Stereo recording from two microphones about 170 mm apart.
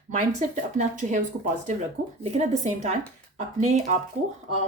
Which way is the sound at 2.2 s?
40° right (ahead or behind).